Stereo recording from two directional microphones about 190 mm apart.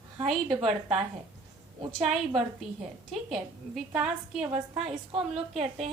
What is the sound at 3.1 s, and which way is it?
A woman's voice, centre (ahead or behind).